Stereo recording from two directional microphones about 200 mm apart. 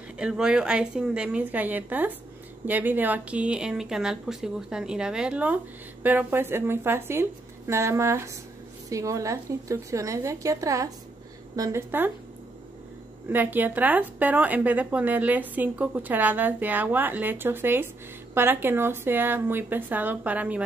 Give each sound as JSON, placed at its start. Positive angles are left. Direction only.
{"t": 0.2, "sound": "a woman's voice", "side_deg": -5}
{"t": 13.3, "sound": "a woman's voice", "side_deg": -10}